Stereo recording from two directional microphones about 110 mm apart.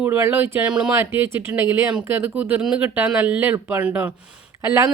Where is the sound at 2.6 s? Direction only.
5° right (ahead or behind).